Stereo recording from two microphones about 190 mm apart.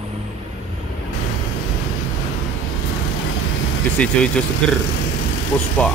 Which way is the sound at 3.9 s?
5° left (ahead or behind).